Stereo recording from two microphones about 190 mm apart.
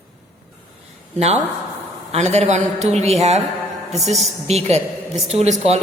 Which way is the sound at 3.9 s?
Centre (ahead or behind).